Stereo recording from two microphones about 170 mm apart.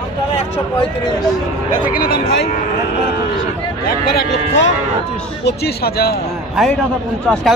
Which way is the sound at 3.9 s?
75° left (ahead or behind).